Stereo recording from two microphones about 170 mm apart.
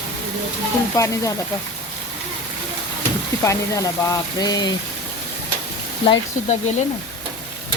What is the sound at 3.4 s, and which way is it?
Speech, 20° left (ahead or behind).